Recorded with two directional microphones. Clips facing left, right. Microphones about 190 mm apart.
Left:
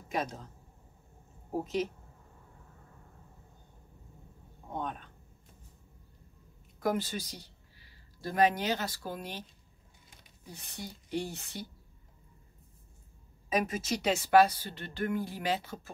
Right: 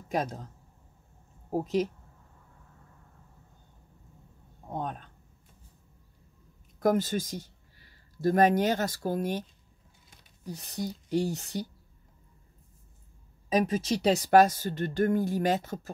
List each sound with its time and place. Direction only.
0.1 s speech: 40° right (ahead or behind)
4.7 s speech: 40° right (ahead or behind)
6.8 s speech: 45° right (ahead or behind)
10.4 s speech: 40° right (ahead or behind)
13.5 s speech: 30° right (ahead or behind)